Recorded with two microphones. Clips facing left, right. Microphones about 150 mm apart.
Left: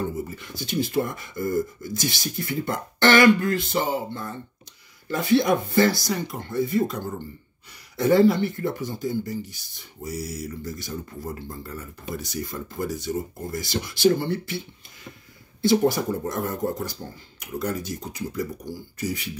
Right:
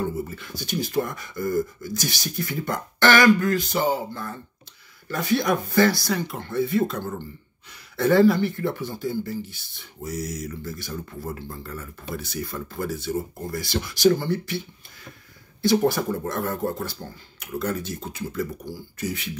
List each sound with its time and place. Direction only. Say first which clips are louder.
0.4 s speech: left 2 dB; 20° left (ahead or behind)
8.0 s speech: even; 20° left (ahead or behind)
10.7 s speech: even; 20° left (ahead or behind)
15.6 s speech: even; 20° left (ahead or behind)
17.6 s speech: right 1 dB; 10° left (ahead or behind)